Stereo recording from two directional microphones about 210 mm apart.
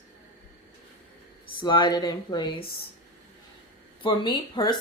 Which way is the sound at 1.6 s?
20° left (ahead or behind).